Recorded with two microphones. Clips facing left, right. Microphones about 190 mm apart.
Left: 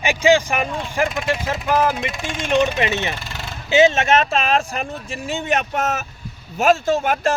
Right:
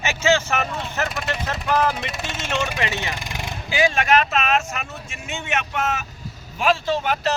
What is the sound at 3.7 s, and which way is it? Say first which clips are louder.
Speech: left 5 dB; 25° left (ahead or behind).